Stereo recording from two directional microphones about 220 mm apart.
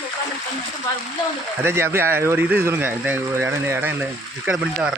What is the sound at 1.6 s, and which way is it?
Speech, 10° right (ahead or behind).